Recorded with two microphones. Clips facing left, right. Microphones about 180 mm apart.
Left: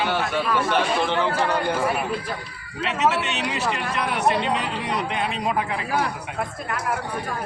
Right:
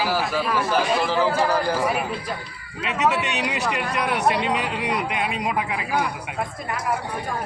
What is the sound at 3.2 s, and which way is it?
Speech, 15° right (ahead or behind).